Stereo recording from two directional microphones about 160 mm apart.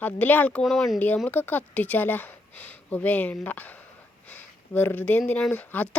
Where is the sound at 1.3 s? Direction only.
10° left (ahead or behind).